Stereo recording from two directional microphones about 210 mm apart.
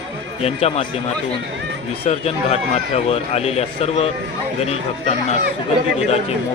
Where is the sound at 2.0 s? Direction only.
30° left (ahead or behind).